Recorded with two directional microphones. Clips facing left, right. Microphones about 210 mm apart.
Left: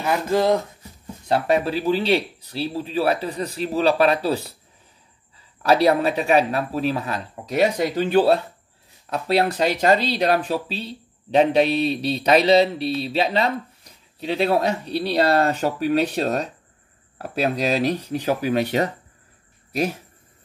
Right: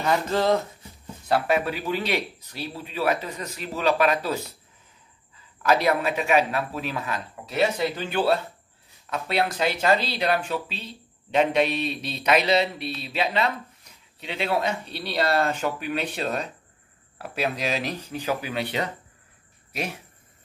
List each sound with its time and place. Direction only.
0.0 s speech: 10° left (ahead or behind)
1.3 s speech: 30° left (ahead or behind)
5.6 s speech: 35° left (ahead or behind)